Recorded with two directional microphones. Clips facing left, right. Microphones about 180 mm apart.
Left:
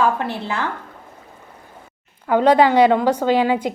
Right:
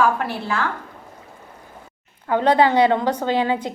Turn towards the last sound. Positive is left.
turn(degrees=10)  # may be behind; listen again after turning